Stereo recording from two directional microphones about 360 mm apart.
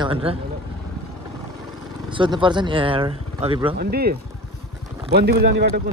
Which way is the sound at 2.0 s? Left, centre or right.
Centre.